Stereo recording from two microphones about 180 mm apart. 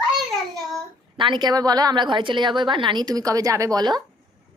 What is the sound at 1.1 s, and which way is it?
A woman's voice, 25° right (ahead or behind).